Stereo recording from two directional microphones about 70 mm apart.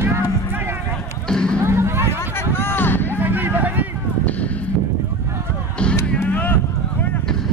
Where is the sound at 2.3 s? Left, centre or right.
Left.